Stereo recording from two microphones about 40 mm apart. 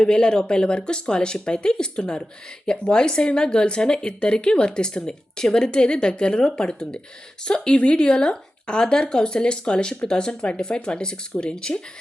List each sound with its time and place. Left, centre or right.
0.0 s a woman's voice: left